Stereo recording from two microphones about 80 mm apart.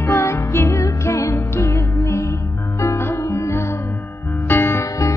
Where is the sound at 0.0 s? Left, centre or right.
Left.